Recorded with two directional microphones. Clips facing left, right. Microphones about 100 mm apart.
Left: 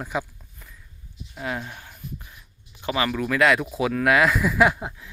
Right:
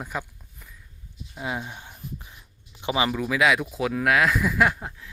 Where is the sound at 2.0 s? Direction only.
20° right (ahead or behind).